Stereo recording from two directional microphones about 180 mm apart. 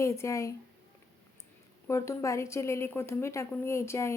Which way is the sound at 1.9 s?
15° left (ahead or behind).